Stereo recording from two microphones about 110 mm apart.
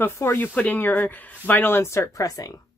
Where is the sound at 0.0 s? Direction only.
20° left (ahead or behind).